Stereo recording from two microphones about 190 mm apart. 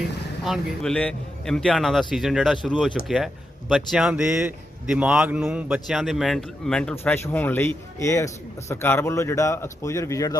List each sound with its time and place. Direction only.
0.4 s a man's voice: centre (ahead or behind); by 10.3 s 15° left (ahead or behind)